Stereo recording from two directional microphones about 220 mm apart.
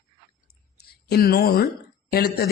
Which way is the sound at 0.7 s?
45° left (ahead or behind).